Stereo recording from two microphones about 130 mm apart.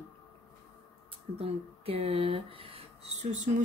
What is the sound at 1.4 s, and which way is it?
Speech, 50° right (ahead or behind).